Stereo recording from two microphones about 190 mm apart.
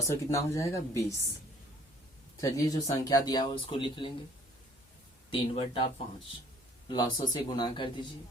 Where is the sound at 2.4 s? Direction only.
20° left (ahead or behind).